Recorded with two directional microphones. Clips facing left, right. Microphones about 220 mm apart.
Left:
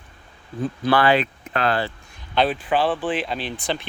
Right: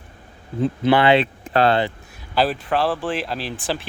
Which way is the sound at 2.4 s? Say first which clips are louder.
Even; 5° right (ahead or behind).